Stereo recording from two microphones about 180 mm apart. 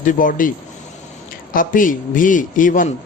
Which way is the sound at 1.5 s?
50° left (ahead or behind).